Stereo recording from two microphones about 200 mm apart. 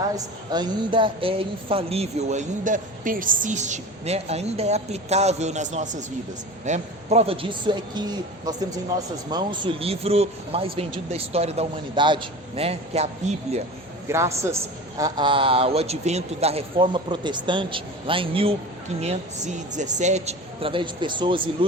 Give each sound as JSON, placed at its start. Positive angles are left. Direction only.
{"t": 0.5, "sound": "a man's voice", "side_deg": -20}
{"t": 14.1, "sound": "a man's voice", "side_deg": -15}
{"t": 19.7, "sound": "a man's voice", "side_deg": -35}